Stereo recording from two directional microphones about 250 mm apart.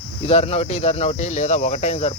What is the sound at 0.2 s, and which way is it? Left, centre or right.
Speech, left.